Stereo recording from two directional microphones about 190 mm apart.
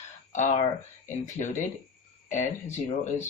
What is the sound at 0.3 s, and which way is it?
Mantra, 40° left (ahead or behind).